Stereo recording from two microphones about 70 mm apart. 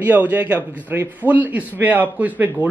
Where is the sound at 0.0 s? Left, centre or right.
Right.